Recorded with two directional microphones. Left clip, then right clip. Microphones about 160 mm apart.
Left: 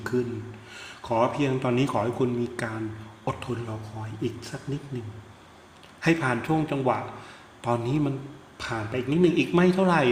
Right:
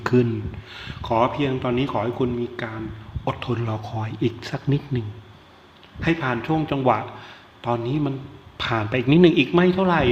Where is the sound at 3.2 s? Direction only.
15° right (ahead or behind).